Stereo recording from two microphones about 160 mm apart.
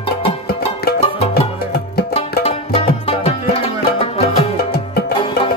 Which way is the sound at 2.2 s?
35° left (ahead or behind).